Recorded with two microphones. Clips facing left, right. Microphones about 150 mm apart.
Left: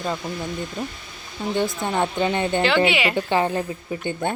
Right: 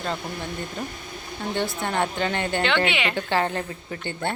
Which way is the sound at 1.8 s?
15° left (ahead or behind).